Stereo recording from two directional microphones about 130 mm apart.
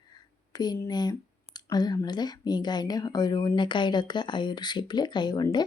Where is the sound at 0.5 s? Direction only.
30° left (ahead or behind).